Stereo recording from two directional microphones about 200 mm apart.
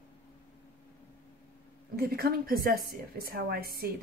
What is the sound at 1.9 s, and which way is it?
A woman's voice, 50° right (ahead or behind).